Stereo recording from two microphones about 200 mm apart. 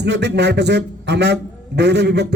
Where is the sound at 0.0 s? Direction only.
60° right (ahead or behind).